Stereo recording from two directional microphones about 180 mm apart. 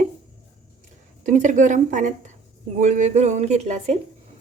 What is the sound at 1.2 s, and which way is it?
A woman's voice, 45° right (ahead or behind).